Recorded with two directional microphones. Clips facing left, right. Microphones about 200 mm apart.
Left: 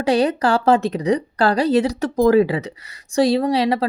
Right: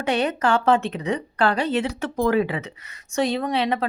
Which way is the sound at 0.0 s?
35° left (ahead or behind).